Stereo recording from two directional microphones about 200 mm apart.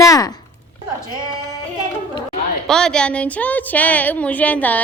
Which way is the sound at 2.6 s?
5° left (ahead or behind).